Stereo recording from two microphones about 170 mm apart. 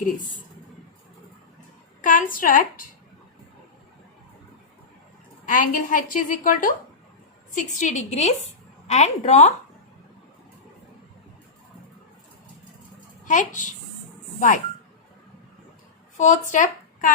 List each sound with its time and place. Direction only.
2.0 s a woman's voice: 50° left (ahead or behind)
5.5 s a woman's voice: 50° left (ahead or behind)
13.2 s a woman's voice: 50° left (ahead or behind)
16.1 s speech: 45° left (ahead or behind)